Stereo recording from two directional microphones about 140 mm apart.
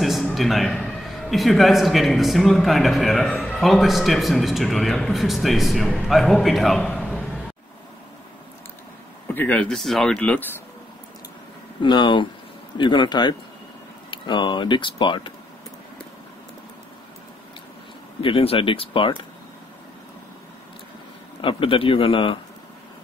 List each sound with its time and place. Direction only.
0.0 s a man's voice: centre (ahead or behind)
9.3 s speech: 10° left (ahead or behind)
11.8 s speech: 35° left (ahead or behind)
18.2 s speech: 40° left (ahead or behind)
21.4 s speech: 40° left (ahead or behind)